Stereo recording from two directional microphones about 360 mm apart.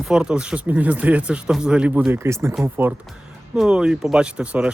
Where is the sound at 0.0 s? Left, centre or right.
Centre.